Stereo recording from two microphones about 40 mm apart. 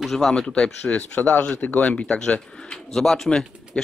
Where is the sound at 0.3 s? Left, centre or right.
Centre.